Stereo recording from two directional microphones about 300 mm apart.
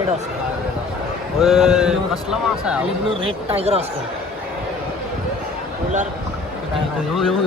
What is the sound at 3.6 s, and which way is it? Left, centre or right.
Speech, centre.